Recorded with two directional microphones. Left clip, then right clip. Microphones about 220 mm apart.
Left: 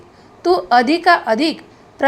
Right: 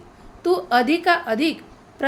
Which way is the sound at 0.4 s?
15° left (ahead or behind).